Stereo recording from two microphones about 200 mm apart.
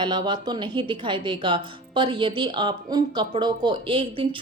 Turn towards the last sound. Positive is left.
turn(degrees=-25)  # may be behind; listen again after turning